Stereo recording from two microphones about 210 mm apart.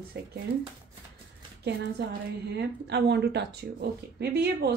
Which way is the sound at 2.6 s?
55° right (ahead or behind).